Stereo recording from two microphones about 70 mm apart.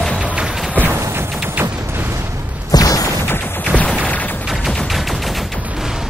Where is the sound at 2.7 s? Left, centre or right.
Left.